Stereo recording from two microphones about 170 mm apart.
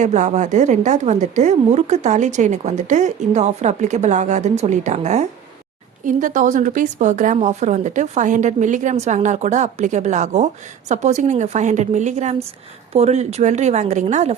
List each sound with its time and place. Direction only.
0.0 s speech: 45° right (ahead or behind)